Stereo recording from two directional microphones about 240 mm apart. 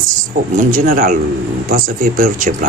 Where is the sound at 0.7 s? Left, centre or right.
Right.